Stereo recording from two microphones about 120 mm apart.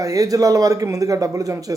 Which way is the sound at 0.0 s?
30° right (ahead or behind).